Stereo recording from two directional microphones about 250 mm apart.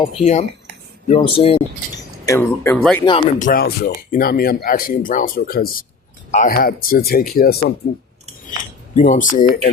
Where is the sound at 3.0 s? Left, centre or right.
Left.